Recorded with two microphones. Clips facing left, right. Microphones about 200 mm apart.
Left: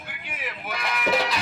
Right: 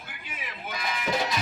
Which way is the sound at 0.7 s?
75° left (ahead or behind).